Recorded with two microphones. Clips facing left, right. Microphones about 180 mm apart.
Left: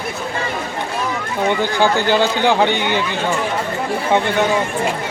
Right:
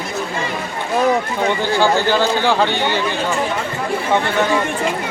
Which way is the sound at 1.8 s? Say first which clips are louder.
Even; 15° left (ahead or behind).